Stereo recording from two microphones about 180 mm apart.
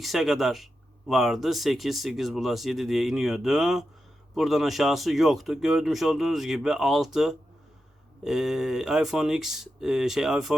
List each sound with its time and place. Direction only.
0.0 s speech: centre (ahead or behind)